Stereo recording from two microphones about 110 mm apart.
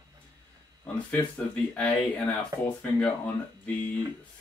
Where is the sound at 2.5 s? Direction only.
30° right (ahead or behind).